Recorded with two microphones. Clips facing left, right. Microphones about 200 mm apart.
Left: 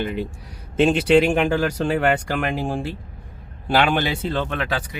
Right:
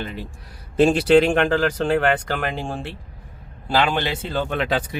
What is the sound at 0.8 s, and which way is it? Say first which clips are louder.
Speech: right 1 dB; centre (ahead or behind).